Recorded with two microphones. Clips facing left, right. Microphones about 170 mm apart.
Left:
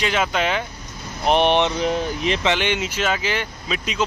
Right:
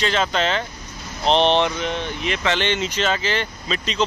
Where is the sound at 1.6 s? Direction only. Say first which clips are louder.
Left 3 dB; 35° left (ahead or behind).